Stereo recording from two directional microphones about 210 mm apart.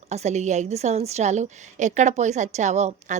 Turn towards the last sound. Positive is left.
turn(degrees=-35)  # may be behind; listen again after turning